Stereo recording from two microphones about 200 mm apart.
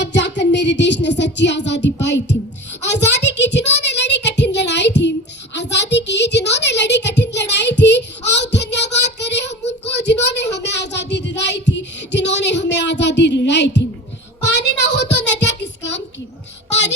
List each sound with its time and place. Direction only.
0.0 s music: 60° left (ahead or behind)
2.8 s a sound: 60° left (ahead or behind)
14.4 s child singing: 60° left (ahead or behind)